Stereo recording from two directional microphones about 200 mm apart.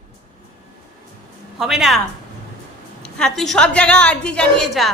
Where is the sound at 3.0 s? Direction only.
5° left (ahead or behind).